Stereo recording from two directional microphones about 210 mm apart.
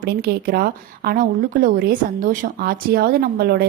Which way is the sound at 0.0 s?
45° right (ahead or behind).